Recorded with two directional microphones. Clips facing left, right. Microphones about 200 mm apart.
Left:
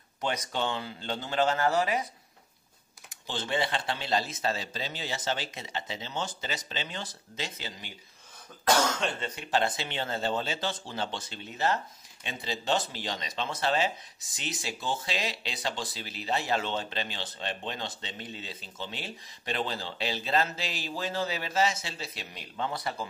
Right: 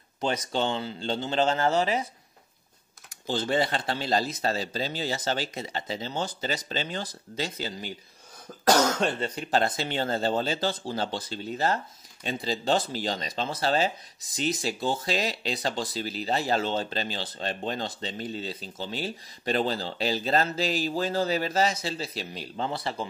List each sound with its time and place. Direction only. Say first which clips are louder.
0.2 s speech: right 4 dB; 30° right (ahead or behind)
3.3 s speech: right 5 dB; 40° right (ahead or behind)